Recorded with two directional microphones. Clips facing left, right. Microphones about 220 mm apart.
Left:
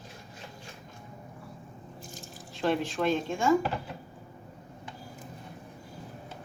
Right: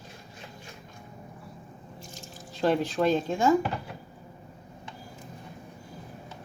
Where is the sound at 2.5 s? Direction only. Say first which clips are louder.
Right 3 dB; 40° right (ahead or behind).